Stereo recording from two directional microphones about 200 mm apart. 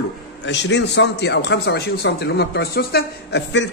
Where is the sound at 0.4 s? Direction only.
60° left (ahead or behind).